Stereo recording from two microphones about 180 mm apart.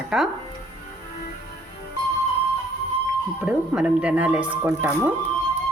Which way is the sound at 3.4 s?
5° right (ahead or behind).